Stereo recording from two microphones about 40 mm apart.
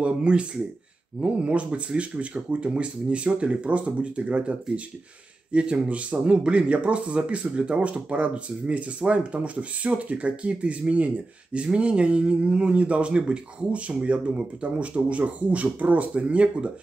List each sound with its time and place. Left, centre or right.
0.0 s speech: right